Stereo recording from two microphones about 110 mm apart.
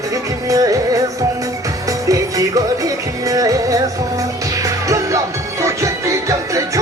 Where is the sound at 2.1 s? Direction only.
30° right (ahead or behind).